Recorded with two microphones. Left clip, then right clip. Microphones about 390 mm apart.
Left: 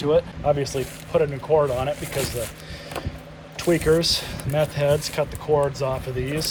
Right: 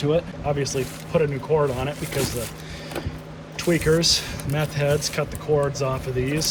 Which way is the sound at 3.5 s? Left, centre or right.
Centre.